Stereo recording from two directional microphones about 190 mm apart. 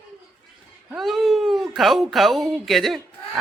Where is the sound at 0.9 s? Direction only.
Centre (ahead or behind).